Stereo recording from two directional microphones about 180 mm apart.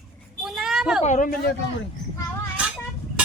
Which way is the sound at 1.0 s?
45° left (ahead or behind).